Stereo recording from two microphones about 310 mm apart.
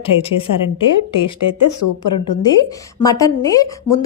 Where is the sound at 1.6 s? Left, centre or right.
Left.